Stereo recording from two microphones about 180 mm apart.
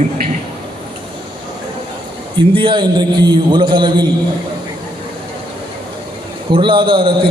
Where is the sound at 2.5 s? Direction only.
30° right (ahead or behind).